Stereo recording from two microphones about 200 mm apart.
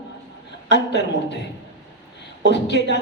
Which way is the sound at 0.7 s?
60° left (ahead or behind).